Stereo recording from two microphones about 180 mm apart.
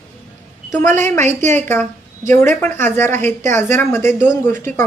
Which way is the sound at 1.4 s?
40° right (ahead or behind).